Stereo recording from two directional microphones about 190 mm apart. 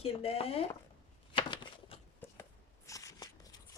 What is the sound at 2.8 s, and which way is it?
Shuffling cards, 15° left (ahead or behind).